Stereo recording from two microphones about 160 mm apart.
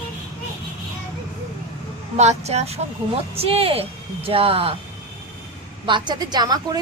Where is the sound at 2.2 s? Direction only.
45° right (ahead or behind).